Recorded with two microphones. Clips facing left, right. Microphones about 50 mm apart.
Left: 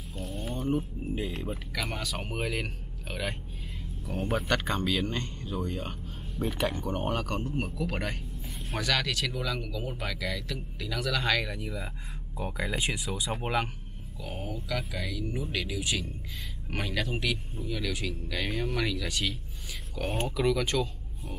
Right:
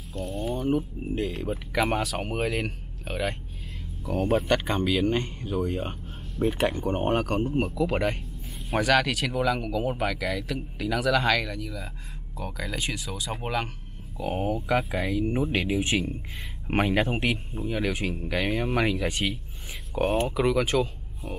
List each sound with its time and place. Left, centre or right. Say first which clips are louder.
0.2 s a sound: right 6 dB; centre
1.5 s speech: right 9 dB; right
2.0 s speech: right 5 dB; centre
4.5 s speech: right 4 dB; centre
6.4 s speech: right 7 dB; centre
6.7 s speech: right 6 dB; centre
7.5 s speech: right 6 dB; right
7.8 s speech: right 7 dB; right; by 11.5 s centre
11.5 s speech: right 1 dB; centre
14.2 s speech: right 10 dB; right